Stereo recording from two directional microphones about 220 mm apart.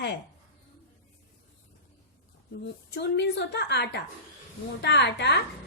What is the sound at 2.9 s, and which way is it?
A woman's voice, 50° left (ahead or behind).